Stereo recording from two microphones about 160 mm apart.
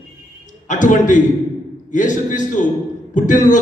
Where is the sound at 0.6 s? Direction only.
50° left (ahead or behind).